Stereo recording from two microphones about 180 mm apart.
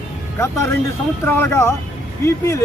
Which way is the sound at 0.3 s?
15° left (ahead or behind).